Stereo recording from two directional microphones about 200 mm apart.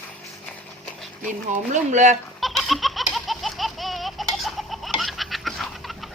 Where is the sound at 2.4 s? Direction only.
Centre (ahead or behind).